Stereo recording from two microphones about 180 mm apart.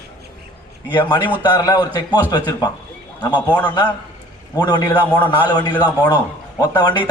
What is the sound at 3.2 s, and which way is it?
Speech, 25° left (ahead or behind).